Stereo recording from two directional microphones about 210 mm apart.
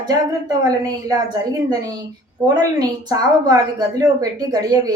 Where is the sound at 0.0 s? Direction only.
15° right (ahead or behind).